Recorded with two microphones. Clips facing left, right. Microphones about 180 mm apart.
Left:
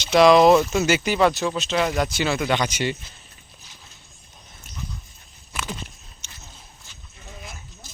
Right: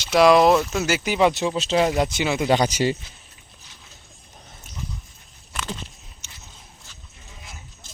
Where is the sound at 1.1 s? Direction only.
20° right (ahead or behind).